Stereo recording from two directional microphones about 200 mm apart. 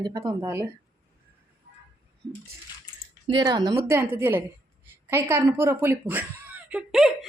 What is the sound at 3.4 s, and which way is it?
Speech, 20° right (ahead or behind).